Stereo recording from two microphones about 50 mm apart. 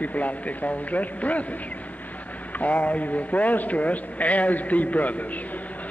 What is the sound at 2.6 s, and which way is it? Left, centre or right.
A man's voice, left.